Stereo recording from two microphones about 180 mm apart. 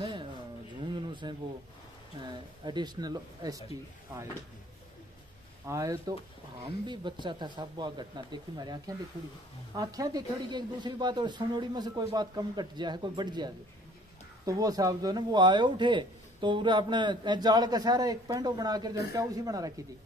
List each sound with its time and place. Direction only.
0.0 s a sound: 25° right (ahead or behind)
2.2 s speech: 25° right (ahead or behind)
5.7 s speech: 20° right (ahead or behind)